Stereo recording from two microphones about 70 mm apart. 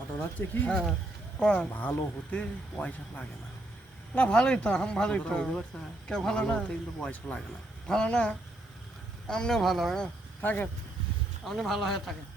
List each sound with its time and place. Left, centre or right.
0.2 s speech: left
0.7 s speech: centre
1.7 s speech: left
4.3 s speech: centre
10.4 s speech: left
11.4 s speech: centre